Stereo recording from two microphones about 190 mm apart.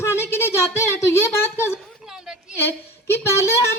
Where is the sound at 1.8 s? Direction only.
5° right (ahead or behind).